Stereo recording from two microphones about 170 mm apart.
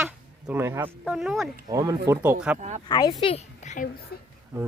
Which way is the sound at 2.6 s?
45° right (ahead or behind).